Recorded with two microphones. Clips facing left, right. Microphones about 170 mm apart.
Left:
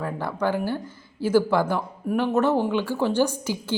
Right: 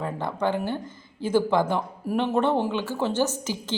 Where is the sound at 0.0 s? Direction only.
20° right (ahead or behind).